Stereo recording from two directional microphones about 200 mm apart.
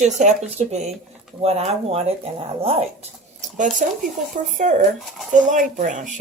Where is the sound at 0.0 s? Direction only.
35° right (ahead or behind).